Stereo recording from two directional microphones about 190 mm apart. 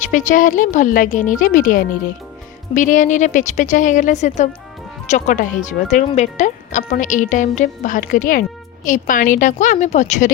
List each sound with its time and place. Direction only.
0.0 s speech: 40° left (ahead or behind)